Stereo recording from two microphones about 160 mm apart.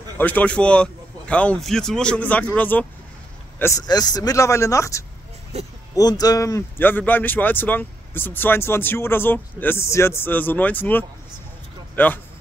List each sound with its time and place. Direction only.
0.2 s speech: 10° left (ahead or behind)
5.5 s speech: 40° right (ahead or behind)
5.9 s speech: 25° left (ahead or behind)